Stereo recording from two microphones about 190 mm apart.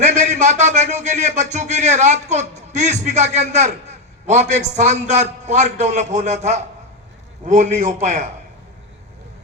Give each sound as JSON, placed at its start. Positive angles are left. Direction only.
{"t": 0.0, "sound": "speech", "side_deg": -40}